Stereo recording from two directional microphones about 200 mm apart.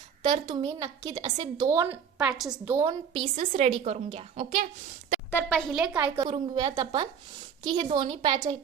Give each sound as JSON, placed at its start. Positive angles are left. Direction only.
{"t": 0.2, "sound": "a woman's voice", "side_deg": -25}
{"t": 2.1, "sound": "a woman's voice", "side_deg": -5}
{"t": 2.8, "sound": "a woman's voice", "side_deg": -25}
{"t": 5.3, "sound": "a woman's voice", "side_deg": 5}
{"t": 6.2, "sound": "a woman's voice", "side_deg": -25}